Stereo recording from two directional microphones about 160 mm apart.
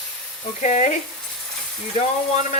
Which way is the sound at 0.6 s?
45° left (ahead or behind).